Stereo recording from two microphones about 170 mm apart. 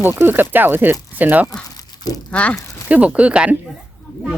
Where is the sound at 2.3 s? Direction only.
10° left (ahead or behind).